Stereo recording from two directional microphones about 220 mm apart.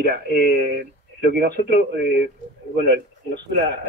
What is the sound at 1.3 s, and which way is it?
A man's voice, 45° right (ahead or behind).